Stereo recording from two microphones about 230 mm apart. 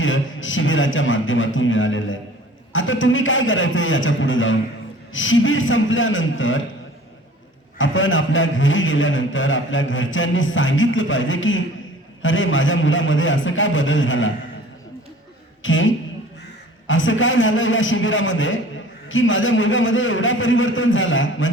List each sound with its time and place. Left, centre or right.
0.0 s a man's voice: left
7.8 s a man's voice: left
15.6 s a man's voice: left